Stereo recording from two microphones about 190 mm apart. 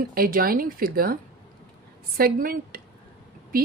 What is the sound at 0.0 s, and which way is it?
Speech, 50° right (ahead or behind).